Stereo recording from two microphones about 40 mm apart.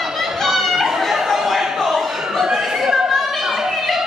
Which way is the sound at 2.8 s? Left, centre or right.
Centre.